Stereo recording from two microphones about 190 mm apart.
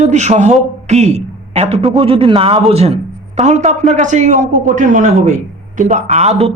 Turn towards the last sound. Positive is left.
turn(degrees=-35)  # may be behind; listen again after turning